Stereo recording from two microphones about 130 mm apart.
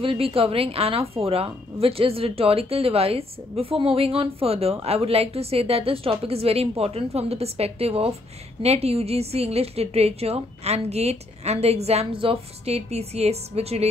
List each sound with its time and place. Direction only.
0.0 s a woman's voice: 45° right (ahead or behind)